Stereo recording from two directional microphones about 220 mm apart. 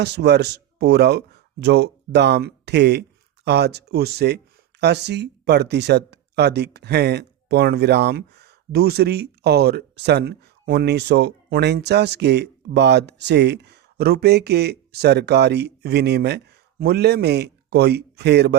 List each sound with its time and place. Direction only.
0.0 s speech: 50° right (ahead or behind)